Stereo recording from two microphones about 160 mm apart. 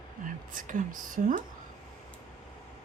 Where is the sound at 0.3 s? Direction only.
55° right (ahead or behind).